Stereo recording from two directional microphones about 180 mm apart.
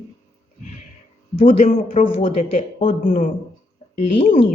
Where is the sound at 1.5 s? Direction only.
40° left (ahead or behind).